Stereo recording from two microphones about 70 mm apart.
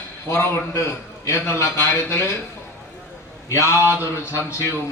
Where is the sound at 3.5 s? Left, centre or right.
Left.